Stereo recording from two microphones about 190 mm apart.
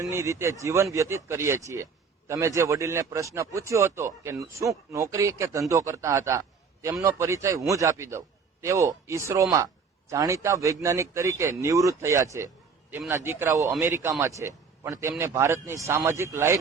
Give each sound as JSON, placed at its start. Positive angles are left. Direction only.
{"t": 0.0, "sound": "speech", "side_deg": -15}